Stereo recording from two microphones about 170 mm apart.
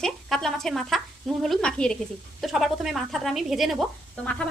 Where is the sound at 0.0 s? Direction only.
Centre (ahead or behind).